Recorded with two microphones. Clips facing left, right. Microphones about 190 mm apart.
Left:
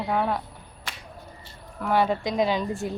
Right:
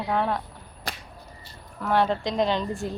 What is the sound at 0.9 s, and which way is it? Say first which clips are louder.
Whip: right 5 dB; 35° right (ahead or behind).